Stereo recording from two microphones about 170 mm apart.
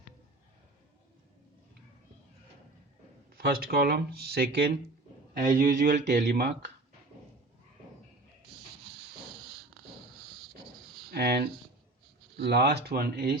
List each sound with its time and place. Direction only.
3.3 s speech: 60° right (ahead or behind); by 4.7 s 80° right
5.4 s speech: 55° right (ahead or behind)
11.1 s speech: 70° right (ahead or behind)